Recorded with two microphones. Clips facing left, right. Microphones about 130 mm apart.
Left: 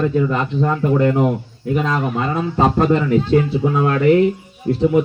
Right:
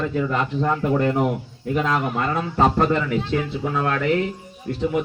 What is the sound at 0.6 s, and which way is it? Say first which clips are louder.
Speech: left 5 dB; 5° left (ahead or behind).